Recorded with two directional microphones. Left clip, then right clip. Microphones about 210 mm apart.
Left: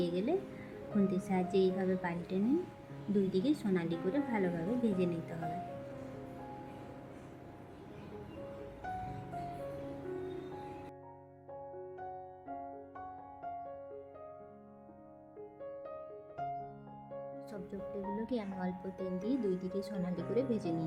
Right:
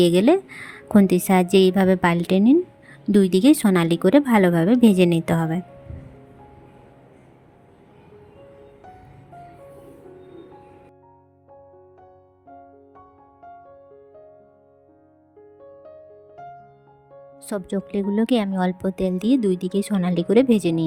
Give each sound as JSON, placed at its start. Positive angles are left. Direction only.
{"t": 0.0, "sound": "a woman's voice", "side_deg": -55}
{"t": 17.4, "sound": "a woman's voice", "side_deg": -50}